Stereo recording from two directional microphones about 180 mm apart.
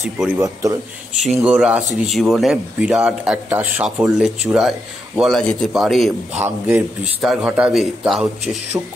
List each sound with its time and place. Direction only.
0.4 s speech: 20° right (ahead or behind)
1.2 s speech: 5° right (ahead or behind)
6.4 s a man's voice: 10° right (ahead or behind)